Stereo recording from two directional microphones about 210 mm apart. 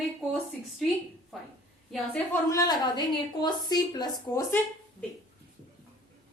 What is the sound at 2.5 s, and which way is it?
A woman's voice, 20° left (ahead or behind).